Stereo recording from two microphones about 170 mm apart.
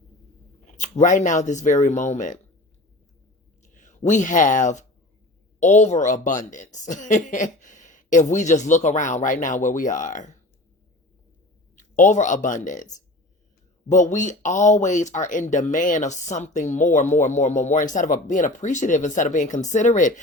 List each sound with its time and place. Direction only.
0.6 s speech: 45° left (ahead or behind)
3.8 s speech: 45° left (ahead or behind)
11.8 s speech: 45° left (ahead or behind)